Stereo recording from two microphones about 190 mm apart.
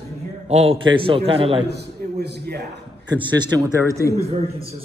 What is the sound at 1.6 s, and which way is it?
A man's voice, 60° right (ahead or behind).